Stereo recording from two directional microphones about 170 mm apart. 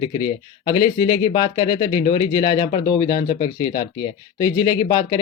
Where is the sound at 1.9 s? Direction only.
25° left (ahead or behind).